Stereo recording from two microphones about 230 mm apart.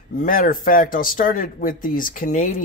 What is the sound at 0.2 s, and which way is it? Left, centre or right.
Speech, left.